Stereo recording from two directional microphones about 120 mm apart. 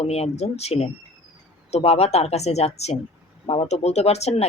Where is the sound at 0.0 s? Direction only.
60° left (ahead or behind).